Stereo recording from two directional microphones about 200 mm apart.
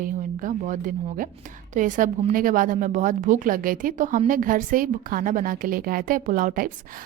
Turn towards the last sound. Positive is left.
turn(degrees=-40)  # may be behind; listen again after turning